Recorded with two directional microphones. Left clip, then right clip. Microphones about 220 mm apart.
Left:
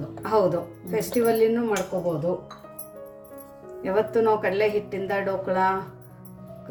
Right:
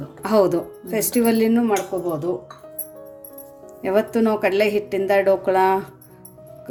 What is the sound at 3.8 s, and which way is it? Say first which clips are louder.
Speech: right 3 dB; 50° right (ahead or behind).